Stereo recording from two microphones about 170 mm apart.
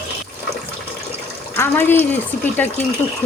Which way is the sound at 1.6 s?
10° left (ahead or behind).